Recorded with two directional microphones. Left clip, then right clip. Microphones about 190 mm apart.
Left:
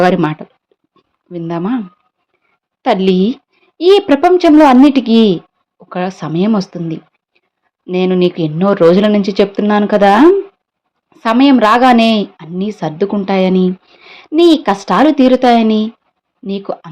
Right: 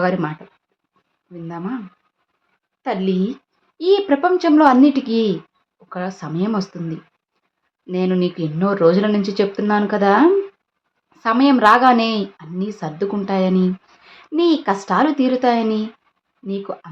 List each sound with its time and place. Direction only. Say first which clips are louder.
0.0 s speech: left 9 dB; 40° left (ahead or behind)
2.8 s a woman's voice: left 10 dB; 40° left (ahead or behind)